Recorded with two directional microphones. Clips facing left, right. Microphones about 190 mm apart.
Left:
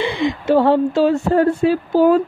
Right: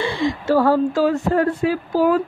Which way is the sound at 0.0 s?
20° left (ahead or behind).